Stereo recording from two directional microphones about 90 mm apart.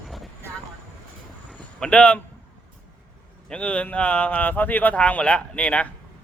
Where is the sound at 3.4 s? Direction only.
15° left (ahead or behind).